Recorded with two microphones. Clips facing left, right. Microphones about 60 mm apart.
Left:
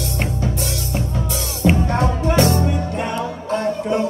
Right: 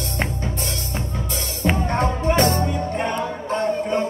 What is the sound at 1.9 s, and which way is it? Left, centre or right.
Music, right.